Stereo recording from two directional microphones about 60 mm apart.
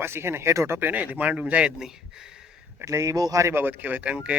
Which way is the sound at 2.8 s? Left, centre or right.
Right.